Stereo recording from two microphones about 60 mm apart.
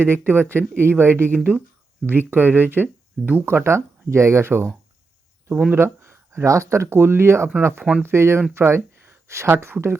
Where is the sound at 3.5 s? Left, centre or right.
Right.